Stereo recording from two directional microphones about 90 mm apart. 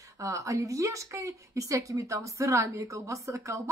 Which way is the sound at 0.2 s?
35° right (ahead or behind).